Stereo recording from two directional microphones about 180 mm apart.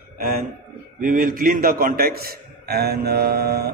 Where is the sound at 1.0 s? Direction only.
50° right (ahead or behind).